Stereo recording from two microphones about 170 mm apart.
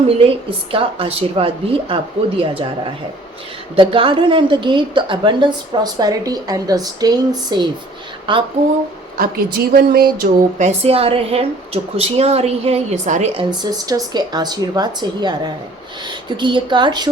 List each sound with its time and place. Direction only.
0.2 s a woman's voice: 35° right (ahead or behind)
9.1 s speech: 60° right (ahead or behind)
10.6 s a woman's voice: 40° right (ahead or behind)
13.3 s a woman's voice: 25° right (ahead or behind)